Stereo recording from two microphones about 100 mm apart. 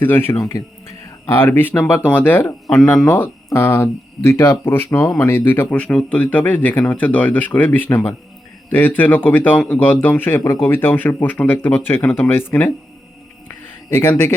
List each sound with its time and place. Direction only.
0.0 s speech: 20° left (ahead or behind)
13.9 s speech: 20° left (ahead or behind)